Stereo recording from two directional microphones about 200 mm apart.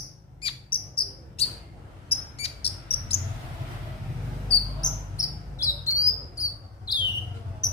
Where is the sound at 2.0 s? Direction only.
30° left (ahead or behind).